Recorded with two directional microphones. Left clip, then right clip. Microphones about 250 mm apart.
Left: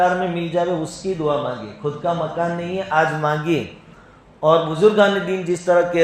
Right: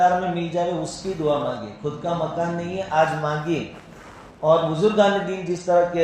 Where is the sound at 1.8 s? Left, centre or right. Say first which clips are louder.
Left 4 dB; left.